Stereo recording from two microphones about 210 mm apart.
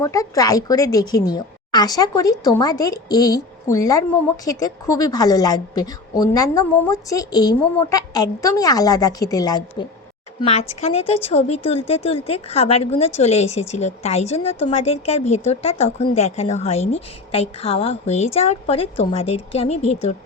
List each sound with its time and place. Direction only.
0.0 s a woman's voice: 15° left (ahead or behind)
10.4 s speech: 30° left (ahead or behind)